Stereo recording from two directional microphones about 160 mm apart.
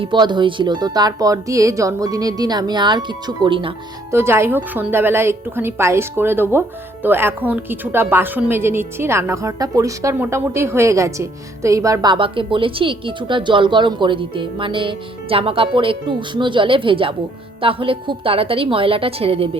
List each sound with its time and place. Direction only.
0.0 s a woman's voice: 30° right (ahead or behind)
4.1 s a woman's voice: 15° right (ahead or behind); by 19.5 s 35° right (ahead or behind)